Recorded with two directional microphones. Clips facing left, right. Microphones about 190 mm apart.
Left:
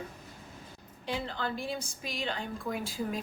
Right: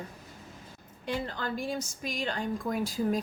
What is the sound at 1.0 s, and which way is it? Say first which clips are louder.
A woman's voice: right 1 dB; 45° right (ahead or behind).